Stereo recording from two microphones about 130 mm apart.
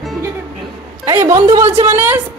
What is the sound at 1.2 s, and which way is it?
A woman's voice, 25° right (ahead or behind).